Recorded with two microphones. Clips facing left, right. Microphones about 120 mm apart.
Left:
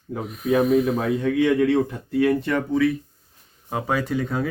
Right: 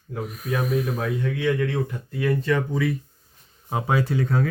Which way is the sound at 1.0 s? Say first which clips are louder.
Left 4 dB; 90° left.